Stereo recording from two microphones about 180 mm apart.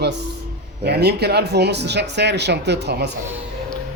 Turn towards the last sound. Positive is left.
turn(degrees=-70)  # may be behind; listen again after turning